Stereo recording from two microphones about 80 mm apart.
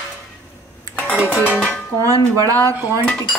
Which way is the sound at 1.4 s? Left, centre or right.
Left.